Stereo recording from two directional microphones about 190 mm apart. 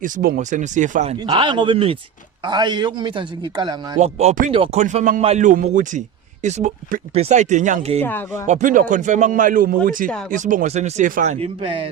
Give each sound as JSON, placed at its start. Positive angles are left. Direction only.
{"t": 0.0, "sound": "speech", "side_deg": -45}
{"t": 1.2, "sound": "a man's voice", "side_deg": -20}
{"t": 3.9, "sound": "speech", "side_deg": -35}
{"t": 8.0, "sound": "speech", "side_deg": 10}
{"t": 8.4, "sound": "speech", "side_deg": -40}